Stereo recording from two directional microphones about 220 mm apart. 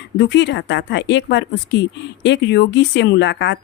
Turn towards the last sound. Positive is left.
turn(degrees=55)  # may be behind; listen again after turning